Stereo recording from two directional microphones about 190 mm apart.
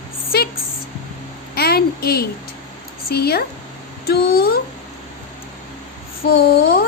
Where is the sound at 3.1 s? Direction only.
55° left (ahead or behind).